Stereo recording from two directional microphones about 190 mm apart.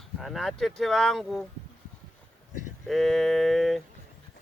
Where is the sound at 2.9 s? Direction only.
Centre (ahead or behind).